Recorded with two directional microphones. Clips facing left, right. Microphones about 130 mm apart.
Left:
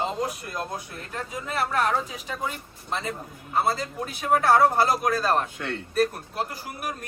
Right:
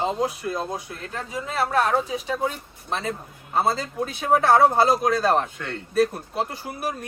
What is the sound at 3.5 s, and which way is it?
A man's voice, 25° right (ahead or behind).